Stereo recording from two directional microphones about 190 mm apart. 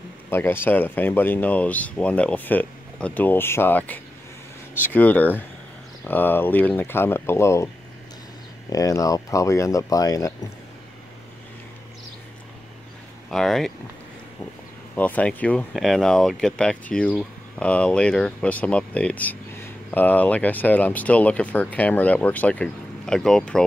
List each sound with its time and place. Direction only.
0.3 s speech: 10° left (ahead or behind)
13.3 s speech: centre (ahead or behind)
15.0 s speech: 10° left (ahead or behind)